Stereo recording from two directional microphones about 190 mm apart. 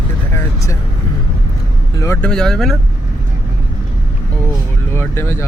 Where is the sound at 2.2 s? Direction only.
5° left (ahead or behind).